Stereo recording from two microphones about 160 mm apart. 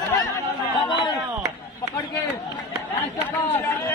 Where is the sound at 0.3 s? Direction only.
30° left (ahead or behind).